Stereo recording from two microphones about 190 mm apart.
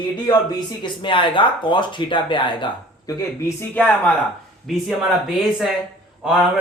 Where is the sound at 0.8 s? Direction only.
25° left (ahead or behind).